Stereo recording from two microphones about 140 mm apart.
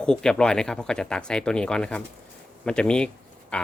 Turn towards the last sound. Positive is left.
turn(degrees=10)  # may be behind; listen again after turning